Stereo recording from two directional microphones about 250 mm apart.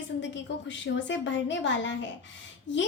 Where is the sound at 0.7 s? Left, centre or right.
Left.